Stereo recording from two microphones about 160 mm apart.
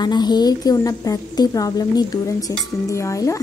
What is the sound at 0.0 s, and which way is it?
A woman's voice, 25° left (ahead or behind).